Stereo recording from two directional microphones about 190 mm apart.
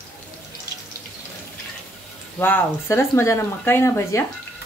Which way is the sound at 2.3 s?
10° left (ahead or behind).